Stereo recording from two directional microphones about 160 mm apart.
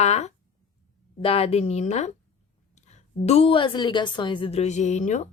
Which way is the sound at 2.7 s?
45° left (ahead or behind).